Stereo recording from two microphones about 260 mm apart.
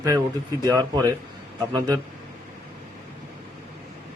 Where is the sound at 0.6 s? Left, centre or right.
Centre.